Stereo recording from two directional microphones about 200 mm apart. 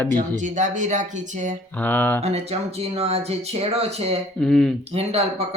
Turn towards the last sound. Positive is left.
turn(degrees=-30)  # may be behind; listen again after turning